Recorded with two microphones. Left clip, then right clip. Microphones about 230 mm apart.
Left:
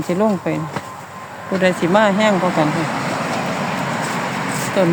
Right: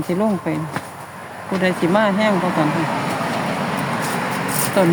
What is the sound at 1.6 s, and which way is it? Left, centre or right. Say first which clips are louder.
Speech: left 3 dB; centre.